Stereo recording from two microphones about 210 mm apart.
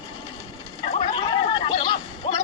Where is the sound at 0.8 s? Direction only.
30° left (ahead or behind).